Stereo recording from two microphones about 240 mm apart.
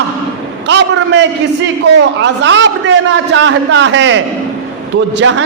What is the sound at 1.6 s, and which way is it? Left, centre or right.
A man's voice, right.